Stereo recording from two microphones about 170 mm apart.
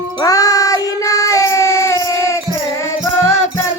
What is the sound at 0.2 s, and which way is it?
Child singing, 20° left (ahead or behind).